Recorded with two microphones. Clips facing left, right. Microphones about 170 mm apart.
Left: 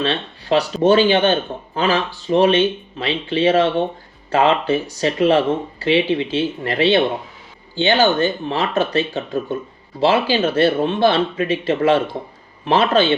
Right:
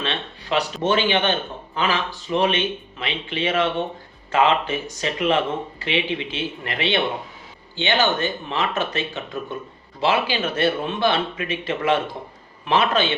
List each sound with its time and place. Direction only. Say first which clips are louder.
0.0 s speech: left 6 dB; 35° left (ahead or behind)